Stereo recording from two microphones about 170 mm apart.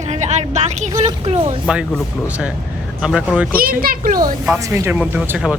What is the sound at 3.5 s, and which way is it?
Speech, 60° right (ahead or behind).